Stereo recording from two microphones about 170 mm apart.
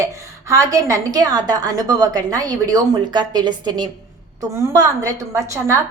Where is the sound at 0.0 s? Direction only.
20° right (ahead or behind).